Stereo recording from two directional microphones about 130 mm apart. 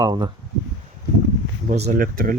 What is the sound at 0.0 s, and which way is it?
Speech, 35° right (ahead or behind).